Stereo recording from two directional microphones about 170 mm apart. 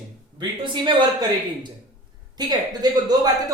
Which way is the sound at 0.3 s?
30° right (ahead or behind).